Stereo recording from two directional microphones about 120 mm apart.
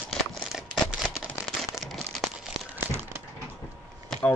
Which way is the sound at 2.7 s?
20° right (ahead or behind).